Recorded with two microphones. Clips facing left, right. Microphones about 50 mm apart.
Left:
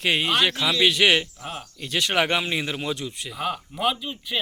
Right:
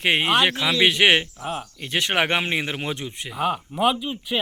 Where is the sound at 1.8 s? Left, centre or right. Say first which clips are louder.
Even; right.